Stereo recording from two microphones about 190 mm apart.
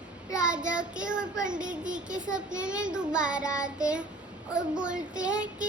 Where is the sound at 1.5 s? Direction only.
45° right (ahead or behind).